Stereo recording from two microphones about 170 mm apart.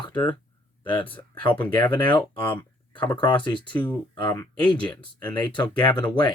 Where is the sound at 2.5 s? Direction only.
10° left (ahead or behind).